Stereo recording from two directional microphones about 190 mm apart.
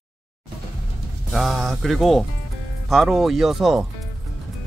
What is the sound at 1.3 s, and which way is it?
Speech, centre (ahead or behind).